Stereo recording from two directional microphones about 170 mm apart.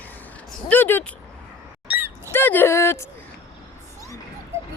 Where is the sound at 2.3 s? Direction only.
10° left (ahead or behind).